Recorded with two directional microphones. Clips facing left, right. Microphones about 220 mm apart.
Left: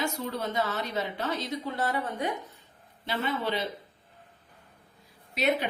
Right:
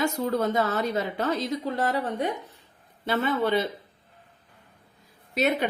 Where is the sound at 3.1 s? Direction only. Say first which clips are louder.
Right 6 dB; 50° right (ahead or behind).